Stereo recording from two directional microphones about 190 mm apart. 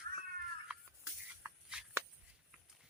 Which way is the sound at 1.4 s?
10° right (ahead or behind).